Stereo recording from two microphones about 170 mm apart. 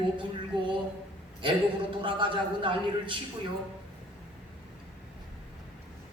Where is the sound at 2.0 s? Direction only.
30° right (ahead or behind).